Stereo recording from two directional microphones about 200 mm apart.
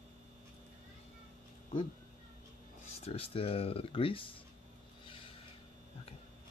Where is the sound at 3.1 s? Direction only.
30° left (ahead or behind).